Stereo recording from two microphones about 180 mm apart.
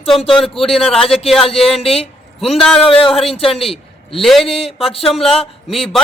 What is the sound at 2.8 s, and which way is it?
A man's voice, 30° left (ahead or behind).